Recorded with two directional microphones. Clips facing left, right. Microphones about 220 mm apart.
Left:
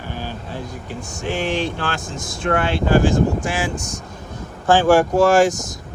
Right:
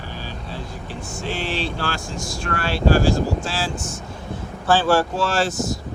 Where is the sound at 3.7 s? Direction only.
40° left (ahead or behind).